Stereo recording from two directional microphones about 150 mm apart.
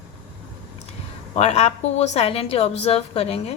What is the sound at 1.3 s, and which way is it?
A woman's voice, 45° left (ahead or behind).